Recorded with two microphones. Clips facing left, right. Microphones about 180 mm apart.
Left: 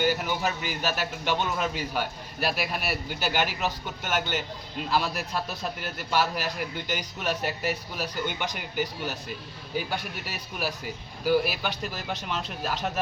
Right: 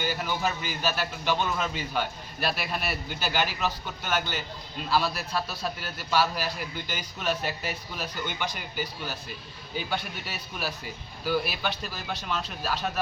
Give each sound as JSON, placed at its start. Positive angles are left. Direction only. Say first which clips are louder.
{"t": 0.0, "sound": "a man's voice", "louder": "left 3 dB", "side_deg": 15}